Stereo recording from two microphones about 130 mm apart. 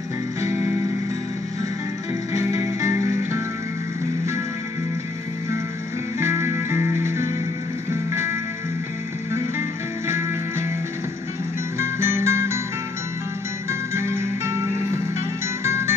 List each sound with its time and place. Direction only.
0.4 s music: 20° right (ahead or behind)
2.3 s music: 20° right (ahead or behind)
6.1 s music: 20° right (ahead or behind)
10.0 s music: 20° right (ahead or behind)
11.8 s music: 20° right (ahead or behind)
13.7 s music: 20° right (ahead or behind)
15.6 s music: 20° right (ahead or behind)